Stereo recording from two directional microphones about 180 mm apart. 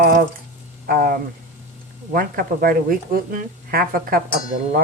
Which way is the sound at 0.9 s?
55° right (ahead or behind).